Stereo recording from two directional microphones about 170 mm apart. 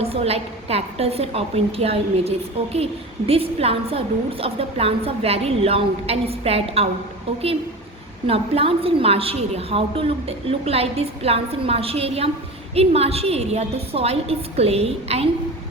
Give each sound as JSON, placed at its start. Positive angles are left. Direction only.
{"t": 0.0, "sound": "a woman's voice", "side_deg": -35}
{"t": 8.3, "sound": "a woman's voice", "side_deg": -35}